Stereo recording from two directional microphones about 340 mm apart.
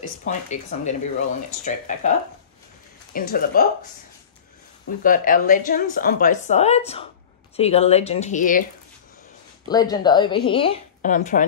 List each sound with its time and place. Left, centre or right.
0.2 s speech: left
3.2 s speech: left
5.0 s speech: left
9.7 s a woman's voice: centre